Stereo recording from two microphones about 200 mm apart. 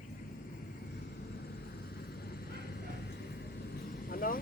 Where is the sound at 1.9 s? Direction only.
55° left (ahead or behind).